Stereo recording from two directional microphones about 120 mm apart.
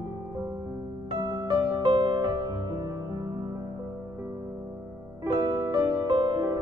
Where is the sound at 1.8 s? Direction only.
45° right (ahead or behind).